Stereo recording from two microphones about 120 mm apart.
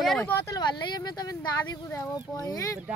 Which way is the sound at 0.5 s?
40° left (ahead or behind).